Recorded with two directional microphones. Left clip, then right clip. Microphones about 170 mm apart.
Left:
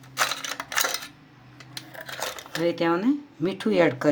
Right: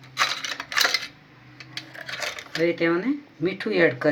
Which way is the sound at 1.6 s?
65° left (ahead or behind).